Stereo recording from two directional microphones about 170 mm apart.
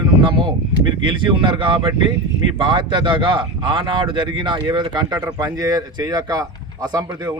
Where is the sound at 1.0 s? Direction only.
30° right (ahead or behind).